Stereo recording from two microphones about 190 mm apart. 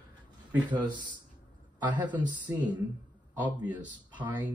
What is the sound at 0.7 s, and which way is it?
Speech, 25° right (ahead or behind).